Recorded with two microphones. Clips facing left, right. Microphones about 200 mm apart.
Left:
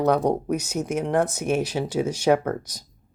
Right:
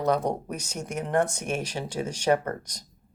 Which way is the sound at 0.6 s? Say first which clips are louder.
Left 7 dB; 5° left (ahead or behind).